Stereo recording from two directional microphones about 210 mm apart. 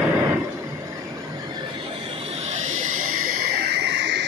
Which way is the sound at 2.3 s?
30° right (ahead or behind).